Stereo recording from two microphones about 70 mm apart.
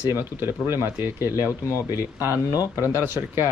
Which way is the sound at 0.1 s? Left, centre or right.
Right.